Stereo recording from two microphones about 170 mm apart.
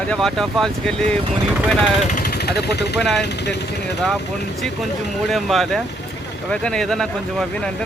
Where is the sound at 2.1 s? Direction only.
60° left (ahead or behind).